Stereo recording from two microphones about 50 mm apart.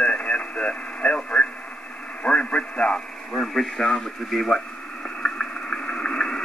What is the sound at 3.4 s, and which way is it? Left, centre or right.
Speech, centre.